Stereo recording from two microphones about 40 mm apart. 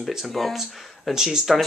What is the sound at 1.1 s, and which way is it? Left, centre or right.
Speech, centre.